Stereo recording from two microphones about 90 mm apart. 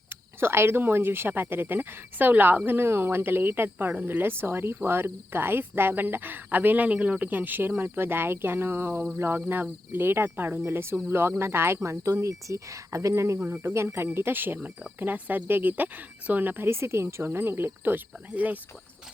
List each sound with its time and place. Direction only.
0.3 s speech: 25° right (ahead or behind)
10.6 s cricket: 30° right (ahead or behind)
13.5 s speech: 25° right (ahead or behind)